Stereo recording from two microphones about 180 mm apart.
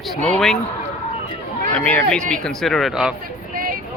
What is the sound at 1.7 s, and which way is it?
Speech, 5° left (ahead or behind).